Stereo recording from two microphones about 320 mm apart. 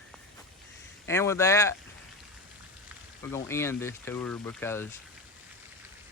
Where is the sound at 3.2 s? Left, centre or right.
Centre.